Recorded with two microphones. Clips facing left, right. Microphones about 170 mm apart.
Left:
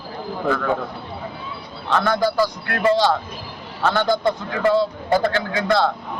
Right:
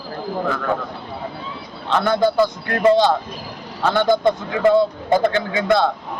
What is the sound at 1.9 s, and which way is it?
A man's voice, 20° right (ahead or behind).